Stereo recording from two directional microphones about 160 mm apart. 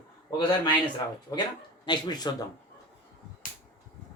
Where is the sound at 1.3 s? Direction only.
20° left (ahead or behind).